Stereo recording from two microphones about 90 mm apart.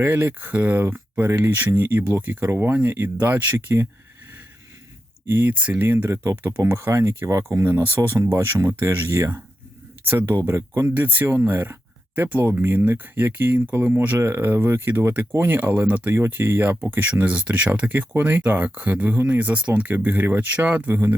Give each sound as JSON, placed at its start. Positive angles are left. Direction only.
{"t": 0.0, "sound": "speech", "side_deg": -20}
{"t": 5.3, "sound": "speech", "side_deg": -20}